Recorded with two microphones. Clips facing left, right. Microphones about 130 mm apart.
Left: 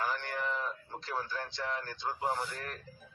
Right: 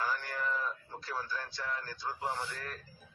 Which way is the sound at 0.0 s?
20° left (ahead or behind).